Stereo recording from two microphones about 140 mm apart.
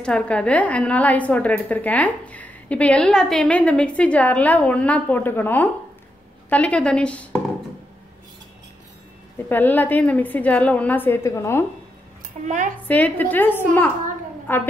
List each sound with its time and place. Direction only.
0.0 s a woman's voice: 5° left (ahead or behind)
9.5 s a woman's voice: 15° left (ahead or behind)
12.4 s speech: 60° right (ahead or behind)
12.8 s a woman's voice: 10° left (ahead or behind)